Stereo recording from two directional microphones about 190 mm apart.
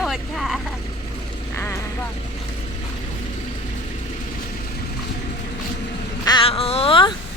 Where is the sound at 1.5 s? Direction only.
15° left (ahead or behind).